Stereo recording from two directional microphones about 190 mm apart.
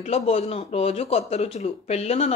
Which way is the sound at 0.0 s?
35° left (ahead or behind).